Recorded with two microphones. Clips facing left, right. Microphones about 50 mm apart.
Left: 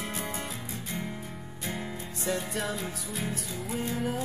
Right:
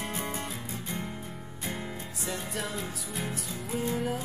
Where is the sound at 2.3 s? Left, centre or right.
Centre.